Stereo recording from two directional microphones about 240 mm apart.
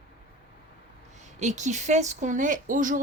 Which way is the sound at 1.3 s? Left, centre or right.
Right.